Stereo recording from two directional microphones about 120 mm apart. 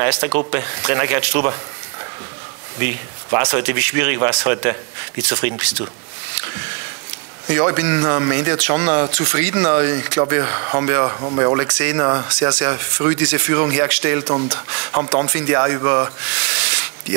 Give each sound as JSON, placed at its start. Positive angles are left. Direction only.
{"t": 0.0, "sound": "speech", "side_deg": -20}
{"t": 2.8, "sound": "speech", "side_deg": -20}
{"t": 6.3, "sound": "a sound", "side_deg": -20}
{"t": 7.4, "sound": "speech", "side_deg": -20}
{"t": 12.0, "sound": "speech", "side_deg": -25}
{"t": 12.3, "sound": "speech", "side_deg": -15}